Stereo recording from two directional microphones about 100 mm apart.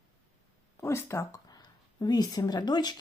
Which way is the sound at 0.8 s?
25° left (ahead or behind).